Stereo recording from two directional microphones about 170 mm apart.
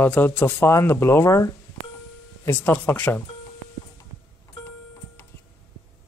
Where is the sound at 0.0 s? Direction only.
10° left (ahead or behind).